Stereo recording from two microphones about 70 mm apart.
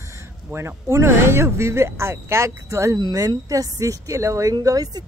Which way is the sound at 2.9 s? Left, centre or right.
Right.